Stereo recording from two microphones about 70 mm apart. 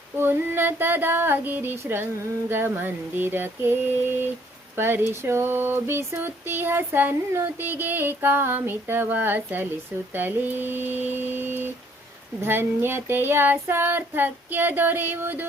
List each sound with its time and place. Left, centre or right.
0.2 s child singing: right
7.4 s a sound: right
12.4 s child singing: right